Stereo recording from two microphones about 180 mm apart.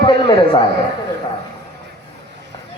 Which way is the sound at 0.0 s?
30° left (ahead or behind).